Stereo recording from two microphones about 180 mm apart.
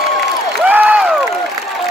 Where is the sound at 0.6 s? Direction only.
10° right (ahead or behind).